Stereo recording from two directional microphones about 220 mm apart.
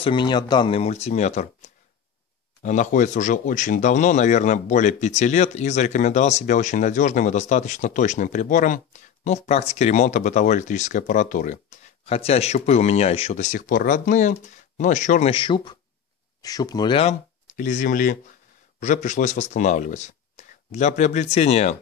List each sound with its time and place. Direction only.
0.0 s speech: 20° left (ahead or behind)
17.6 s speech: 35° left (ahead or behind)